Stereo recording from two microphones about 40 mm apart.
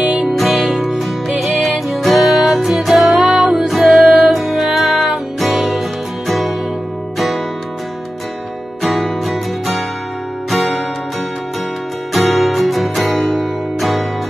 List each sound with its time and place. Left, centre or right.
0.0 s music: right
0.3 s music: centre
3.6 s music: centre
8.8 s music: centre
12.1 s music: centre